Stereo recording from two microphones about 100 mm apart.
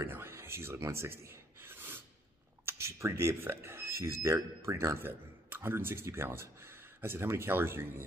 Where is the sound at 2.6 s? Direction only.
30° right (ahead or behind).